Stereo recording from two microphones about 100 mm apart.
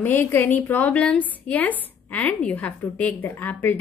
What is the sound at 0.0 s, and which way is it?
A woman's voice, 20° left (ahead or behind).